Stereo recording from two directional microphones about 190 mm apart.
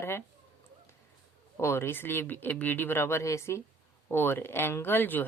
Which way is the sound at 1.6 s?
15° left (ahead or behind).